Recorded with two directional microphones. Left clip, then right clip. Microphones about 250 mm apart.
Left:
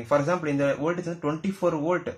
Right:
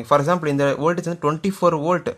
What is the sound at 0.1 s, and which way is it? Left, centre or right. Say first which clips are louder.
Speech: right 6 dB; right.